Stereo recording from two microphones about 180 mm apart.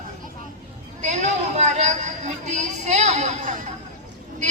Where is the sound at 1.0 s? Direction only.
40° right (ahead or behind).